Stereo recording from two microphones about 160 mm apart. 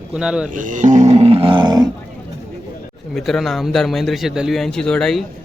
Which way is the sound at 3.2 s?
Centre (ahead or behind).